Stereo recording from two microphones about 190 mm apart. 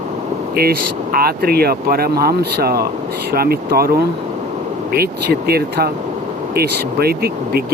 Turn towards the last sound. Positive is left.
turn(degrees=-55)  # may be behind; listen again after turning